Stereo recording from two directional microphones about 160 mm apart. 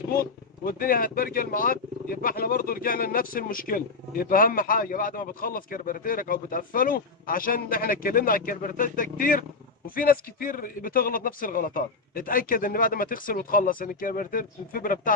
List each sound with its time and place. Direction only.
0.2 s speech: 65° left (ahead or behind)